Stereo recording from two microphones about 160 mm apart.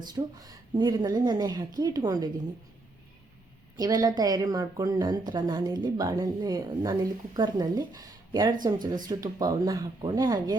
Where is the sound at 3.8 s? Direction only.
25° right (ahead or behind).